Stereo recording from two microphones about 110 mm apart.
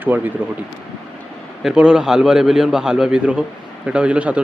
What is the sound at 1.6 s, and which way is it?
Speech, 5° right (ahead or behind).